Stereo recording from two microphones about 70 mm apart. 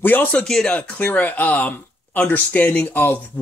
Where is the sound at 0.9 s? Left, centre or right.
Left.